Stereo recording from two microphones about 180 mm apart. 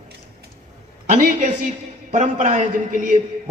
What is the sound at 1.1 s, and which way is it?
A man's voice, 45° right (ahead or behind).